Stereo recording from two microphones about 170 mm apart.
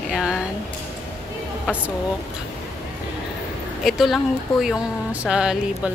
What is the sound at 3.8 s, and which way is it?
Speech, centre (ahead or behind).